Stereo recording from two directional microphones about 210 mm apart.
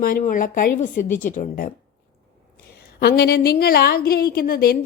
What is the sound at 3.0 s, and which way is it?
A woman's voice, 50° left (ahead or behind).